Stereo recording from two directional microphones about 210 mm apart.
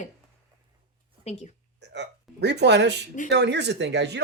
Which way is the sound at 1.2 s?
30° left (ahead or behind).